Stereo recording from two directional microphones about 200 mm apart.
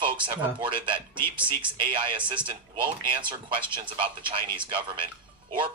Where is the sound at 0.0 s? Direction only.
25° right (ahead or behind).